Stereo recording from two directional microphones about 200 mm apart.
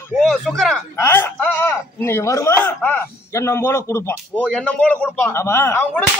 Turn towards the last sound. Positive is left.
turn(degrees=10)  # may be behind; listen again after turning